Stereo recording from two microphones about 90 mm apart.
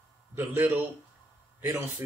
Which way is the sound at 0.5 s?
20° right (ahead or behind).